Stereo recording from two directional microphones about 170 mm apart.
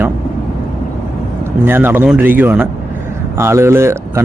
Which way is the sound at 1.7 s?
10° right (ahead or behind).